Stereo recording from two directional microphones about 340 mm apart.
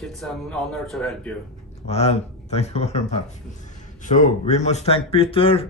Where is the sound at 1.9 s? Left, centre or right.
Centre.